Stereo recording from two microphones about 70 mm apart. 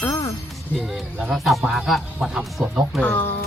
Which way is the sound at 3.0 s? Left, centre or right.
Left.